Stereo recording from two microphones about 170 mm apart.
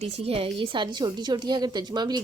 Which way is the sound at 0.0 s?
35° right (ahead or behind).